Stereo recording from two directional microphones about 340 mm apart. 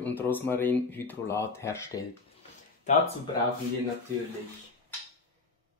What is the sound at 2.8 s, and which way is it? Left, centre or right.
Speech, centre.